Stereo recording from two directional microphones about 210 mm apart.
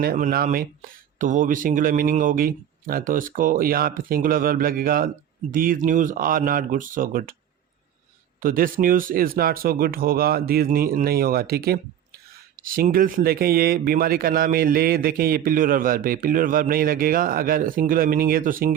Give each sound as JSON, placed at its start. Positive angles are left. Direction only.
{"t": 0.0, "sound": "speech", "side_deg": -45}
{"t": 8.4, "sound": "speech", "side_deg": -40}